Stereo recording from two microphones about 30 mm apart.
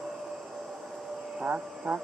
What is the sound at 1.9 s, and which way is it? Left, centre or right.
Insect, right.